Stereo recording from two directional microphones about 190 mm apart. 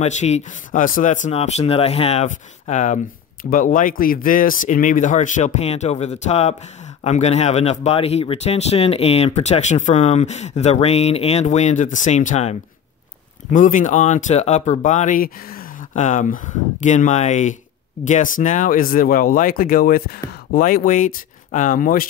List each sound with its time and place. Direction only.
0.0 s speech: 35° left (ahead or behind)